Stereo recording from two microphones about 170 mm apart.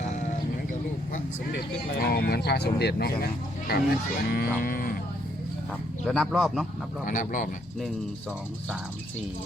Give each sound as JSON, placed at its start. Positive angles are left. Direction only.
{"t": 1.5, "sound": "speech", "side_deg": 65}
{"t": 6.1, "sound": "speech", "side_deg": 0}
{"t": 7.0, "sound": "speech", "side_deg": 50}